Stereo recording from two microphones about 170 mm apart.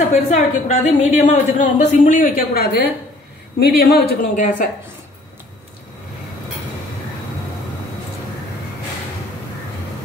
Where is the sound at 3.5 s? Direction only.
70° left (ahead or behind).